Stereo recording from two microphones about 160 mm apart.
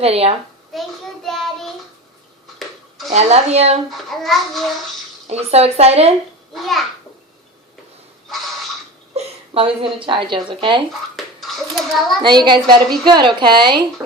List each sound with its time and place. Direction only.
0.0 s speech: 40° right (ahead or behind)
0.7 s a child's voice: centre (ahead or behind)
3.1 s speech: 40° right (ahead or behind)
3.8 s a child's voice: centre (ahead or behind)
5.3 s speech: 40° right (ahead or behind)
6.5 s a child's voice: centre (ahead or behind)
9.1 s a woman's voice: 35° right (ahead or behind)
11.3 s a sound: centre (ahead or behind)
12.2 s a woman's voice: 30° right (ahead or behind)